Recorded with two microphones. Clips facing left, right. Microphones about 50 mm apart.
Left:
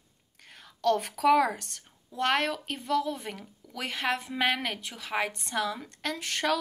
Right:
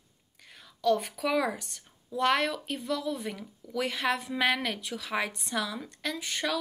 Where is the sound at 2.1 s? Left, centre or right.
Left.